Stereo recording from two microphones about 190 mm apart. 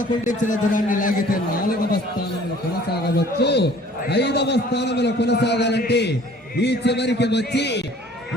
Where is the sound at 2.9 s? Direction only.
60° left (ahead or behind).